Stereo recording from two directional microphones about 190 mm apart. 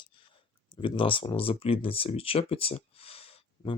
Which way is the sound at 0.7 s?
25° left (ahead or behind).